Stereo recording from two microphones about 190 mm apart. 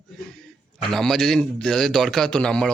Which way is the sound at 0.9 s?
Centre (ahead or behind).